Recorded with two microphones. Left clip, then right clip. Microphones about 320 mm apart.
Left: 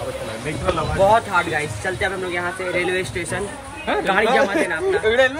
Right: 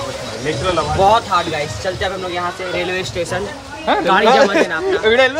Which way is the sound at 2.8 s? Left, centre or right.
Centre.